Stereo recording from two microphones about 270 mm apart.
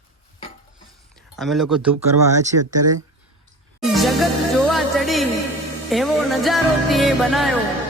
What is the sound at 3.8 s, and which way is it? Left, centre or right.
Music, centre.